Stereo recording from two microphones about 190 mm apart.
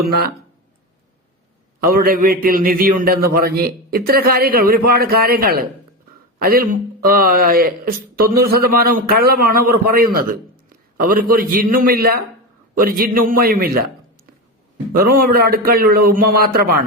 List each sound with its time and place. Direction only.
1.9 s a man's voice: 50° right (ahead or behind)
15.0 s speech: 50° right (ahead or behind)